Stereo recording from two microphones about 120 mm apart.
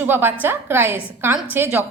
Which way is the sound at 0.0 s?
20° right (ahead or behind).